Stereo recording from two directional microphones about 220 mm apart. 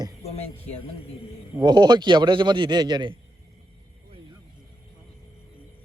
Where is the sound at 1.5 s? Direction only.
20° right (ahead or behind).